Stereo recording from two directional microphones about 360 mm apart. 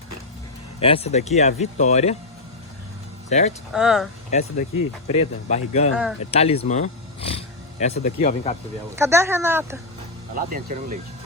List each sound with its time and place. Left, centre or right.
0.8 s speech: centre
3.2 s speech: centre
3.7 s speech: centre
4.3 s speech: centre
9.0 s speech: centre
10.3 s speech: right